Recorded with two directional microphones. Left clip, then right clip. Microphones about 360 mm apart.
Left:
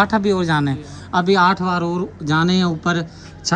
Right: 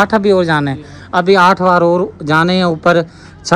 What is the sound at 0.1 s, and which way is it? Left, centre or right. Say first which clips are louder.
Speech: right 7 dB; centre.